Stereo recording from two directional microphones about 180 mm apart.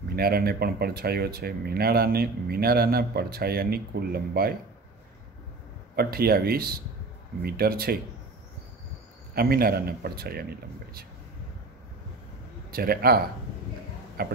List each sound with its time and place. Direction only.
0.1 s speech: 60° right (ahead or behind)
5.9 s speech: 55° right (ahead or behind)
9.3 s speech: 60° right (ahead or behind)
12.7 s speech: 55° right (ahead or behind)